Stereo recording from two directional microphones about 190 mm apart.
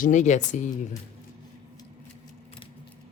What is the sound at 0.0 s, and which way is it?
Speech, 40° left (ahead or behind).